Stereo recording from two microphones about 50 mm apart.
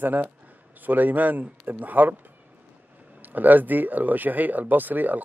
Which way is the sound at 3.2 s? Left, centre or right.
Right.